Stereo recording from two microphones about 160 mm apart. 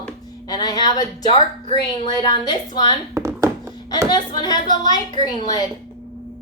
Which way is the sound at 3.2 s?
20° right (ahead or behind).